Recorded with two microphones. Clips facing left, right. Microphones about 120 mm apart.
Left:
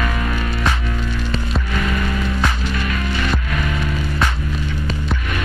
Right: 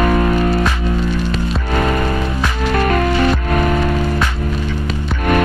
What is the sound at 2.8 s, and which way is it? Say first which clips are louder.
Music: right 10 dB; 55° right (ahead or behind).